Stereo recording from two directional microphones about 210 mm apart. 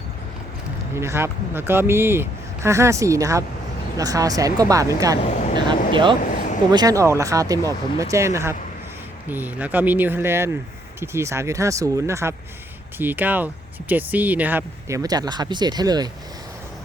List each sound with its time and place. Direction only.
0.9 s speech: 10° right (ahead or behind)
5.2 s speech: 30° left (ahead or behind)
5.9 s speech: 25° right (ahead or behind)